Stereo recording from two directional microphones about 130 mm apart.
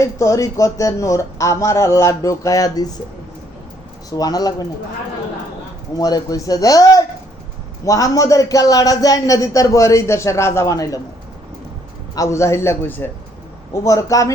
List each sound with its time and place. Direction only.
0.0 s a man's voice: 25° left (ahead or behind)
4.1 s a man's voice: 30° left (ahead or behind)
6.0 s a man's voice: 30° left (ahead or behind)
12.1 s a man's voice: 25° left (ahead or behind)